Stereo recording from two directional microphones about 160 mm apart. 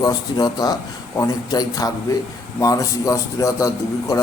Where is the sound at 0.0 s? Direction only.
25° left (ahead or behind).